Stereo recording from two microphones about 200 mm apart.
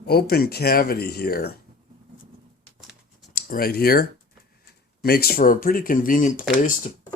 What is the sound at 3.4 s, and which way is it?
A man's voice, 45° left (ahead or behind).